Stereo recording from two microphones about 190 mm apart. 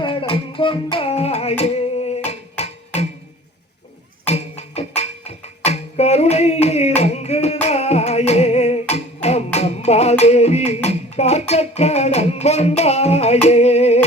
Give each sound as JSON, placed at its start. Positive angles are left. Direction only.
{"t": 0.0, "sound": "music", "side_deg": 25}
{"t": 4.3, "sound": "music", "side_deg": 35}